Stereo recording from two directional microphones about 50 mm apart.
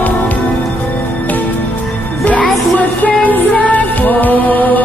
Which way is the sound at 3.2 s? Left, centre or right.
Left.